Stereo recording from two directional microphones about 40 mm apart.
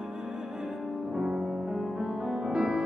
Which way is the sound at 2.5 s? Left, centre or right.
Right.